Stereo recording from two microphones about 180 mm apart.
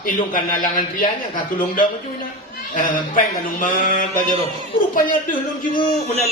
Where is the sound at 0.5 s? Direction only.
50° left (ahead or behind).